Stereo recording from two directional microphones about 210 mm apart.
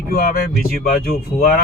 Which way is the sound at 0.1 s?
45° left (ahead or behind).